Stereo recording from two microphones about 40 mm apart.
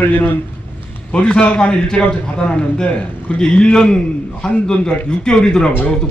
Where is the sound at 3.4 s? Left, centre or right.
Left.